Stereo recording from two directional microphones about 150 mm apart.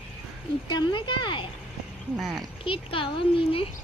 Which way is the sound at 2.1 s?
Centre (ahead or behind).